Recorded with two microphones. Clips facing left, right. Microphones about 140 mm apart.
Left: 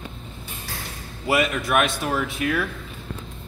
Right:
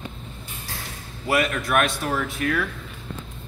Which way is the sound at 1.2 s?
10° left (ahead or behind).